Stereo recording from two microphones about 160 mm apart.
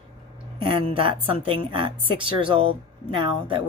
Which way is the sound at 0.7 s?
35° right (ahead or behind).